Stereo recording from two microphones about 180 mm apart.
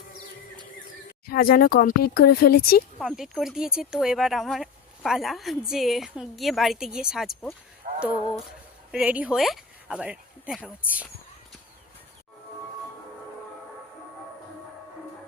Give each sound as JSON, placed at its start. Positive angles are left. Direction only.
{"t": 1.3, "sound": "speech", "side_deg": 55}
{"t": 3.0, "sound": "speech", "side_deg": 0}
{"t": 7.9, "sound": "a sound", "side_deg": -45}
{"t": 8.9, "sound": "speech", "side_deg": -5}